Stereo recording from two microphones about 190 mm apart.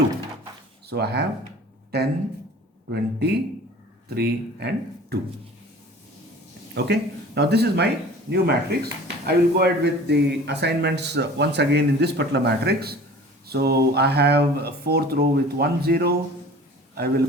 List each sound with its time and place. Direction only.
0.9 s speech: 60° right (ahead or behind)
6.7 s speech: 60° right (ahead or behind)